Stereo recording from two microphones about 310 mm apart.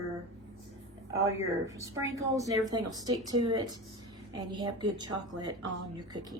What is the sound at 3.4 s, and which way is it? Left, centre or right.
Speech, right.